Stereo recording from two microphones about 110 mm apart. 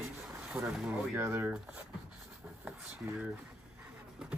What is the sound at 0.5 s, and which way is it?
Speech, 10° right (ahead or behind).